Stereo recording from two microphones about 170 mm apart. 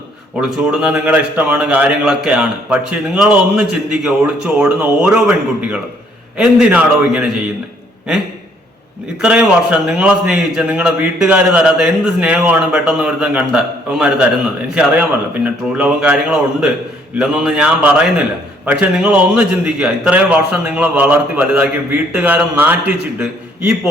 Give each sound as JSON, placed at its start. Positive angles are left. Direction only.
{"t": 0.3, "sound": "a man's voice", "side_deg": 0}
{"t": 9.2, "sound": "a man's voice", "side_deg": -5}
{"t": 15.4, "sound": "a man's voice", "side_deg": -5}